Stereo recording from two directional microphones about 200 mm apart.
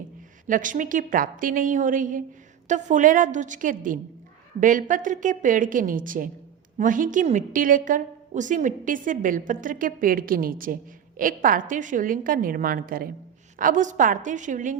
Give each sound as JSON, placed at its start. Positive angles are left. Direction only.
{"t": 0.4, "sound": "a woman's voice", "side_deg": -40}